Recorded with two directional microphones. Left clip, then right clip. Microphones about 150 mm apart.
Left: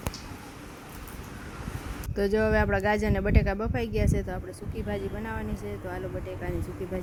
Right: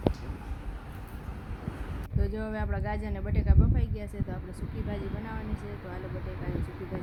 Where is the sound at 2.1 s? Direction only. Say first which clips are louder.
Left 12 dB; 35° left (ahead or behind).